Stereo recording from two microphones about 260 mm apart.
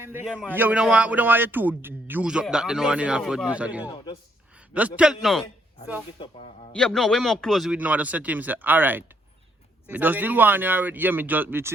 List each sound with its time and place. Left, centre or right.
0.0 s a man's voice: centre
3.8 s a man's voice: centre
4.7 s a man's voice: centre
6.1 s a man's voice: centre
6.7 s a man's voice: centre